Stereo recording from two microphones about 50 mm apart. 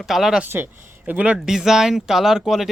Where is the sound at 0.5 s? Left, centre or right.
Right.